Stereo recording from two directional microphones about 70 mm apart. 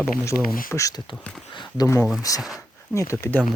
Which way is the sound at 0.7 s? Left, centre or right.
Left.